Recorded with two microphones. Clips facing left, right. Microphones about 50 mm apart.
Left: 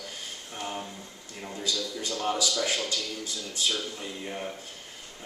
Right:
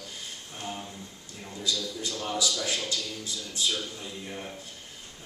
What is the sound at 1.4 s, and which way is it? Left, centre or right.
A man's voice, left.